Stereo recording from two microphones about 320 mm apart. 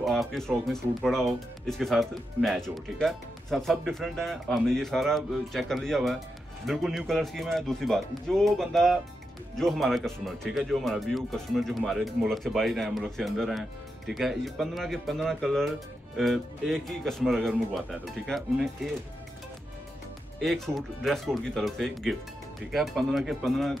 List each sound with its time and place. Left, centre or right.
0.0 s speech: centre
20.4 s speech: centre